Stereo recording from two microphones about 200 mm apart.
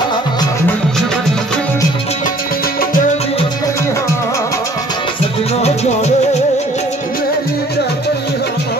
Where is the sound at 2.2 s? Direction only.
45° left (ahead or behind); by 3.4 s 30° left (ahead or behind).